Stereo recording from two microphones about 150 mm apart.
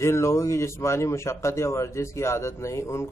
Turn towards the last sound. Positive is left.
turn(degrees=20)  # may be behind; listen again after turning